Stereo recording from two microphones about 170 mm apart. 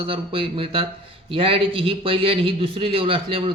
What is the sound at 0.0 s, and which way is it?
Speech, 35° right (ahead or behind).